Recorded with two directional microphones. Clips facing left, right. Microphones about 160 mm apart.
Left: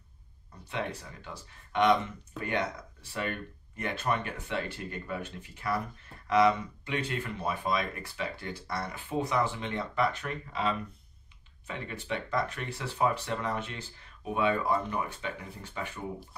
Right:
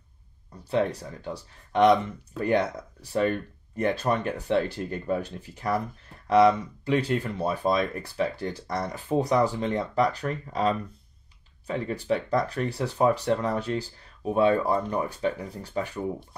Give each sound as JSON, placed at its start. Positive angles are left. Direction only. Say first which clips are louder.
{"t": 0.7, "sound": "speech", "louder": "right 10 dB", "side_deg": -35}